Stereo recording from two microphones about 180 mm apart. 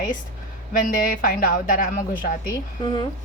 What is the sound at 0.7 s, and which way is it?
A man's voice, 50° left (ahead or behind).